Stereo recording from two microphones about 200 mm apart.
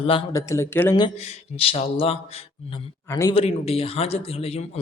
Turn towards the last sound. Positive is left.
turn(degrees=30)  # may be behind; listen again after turning